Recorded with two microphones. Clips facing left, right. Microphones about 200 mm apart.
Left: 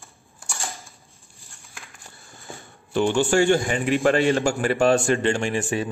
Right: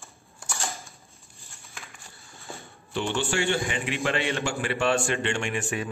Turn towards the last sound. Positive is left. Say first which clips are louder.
# left 5 dB
turn(degrees=30)  # may be behind; listen again after turning